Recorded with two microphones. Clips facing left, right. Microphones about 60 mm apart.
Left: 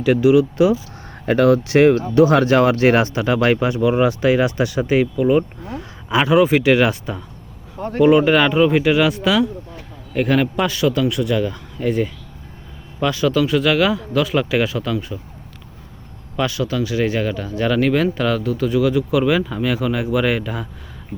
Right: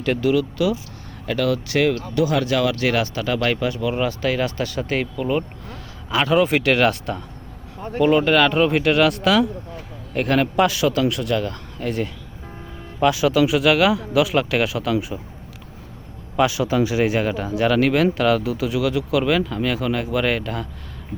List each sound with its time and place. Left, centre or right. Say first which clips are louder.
0.0 s speech: left 6 dB; centre
0.5 s speech: left 6 dB; left; by 12.1 s centre
13.0 s speech: right 1 dB; centre
16.4 s speech: right 2 dB; centre